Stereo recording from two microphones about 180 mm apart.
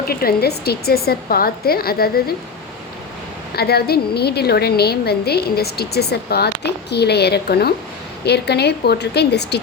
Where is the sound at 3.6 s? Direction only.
60° left (ahead or behind).